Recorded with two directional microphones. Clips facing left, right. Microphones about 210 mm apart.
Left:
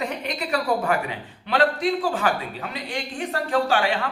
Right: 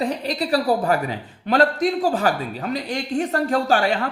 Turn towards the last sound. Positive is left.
turn(degrees=-40)  # may be behind; listen again after turning